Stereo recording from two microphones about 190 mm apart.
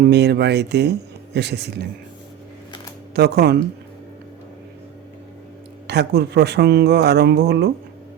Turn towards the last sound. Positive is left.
turn(degrees=-60)  # may be behind; listen again after turning